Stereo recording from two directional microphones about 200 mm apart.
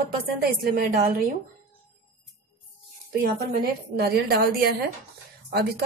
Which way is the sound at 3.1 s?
50° right (ahead or behind).